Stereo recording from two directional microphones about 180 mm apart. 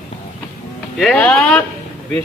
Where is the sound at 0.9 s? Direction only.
5° left (ahead or behind).